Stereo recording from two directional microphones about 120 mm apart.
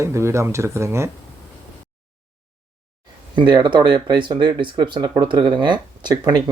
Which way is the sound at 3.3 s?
40° right (ahead or behind).